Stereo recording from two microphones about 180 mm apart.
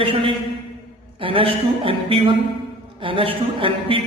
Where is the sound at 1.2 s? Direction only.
30° right (ahead or behind).